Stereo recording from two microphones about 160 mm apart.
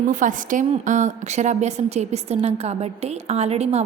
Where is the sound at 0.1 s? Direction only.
55° right (ahead or behind).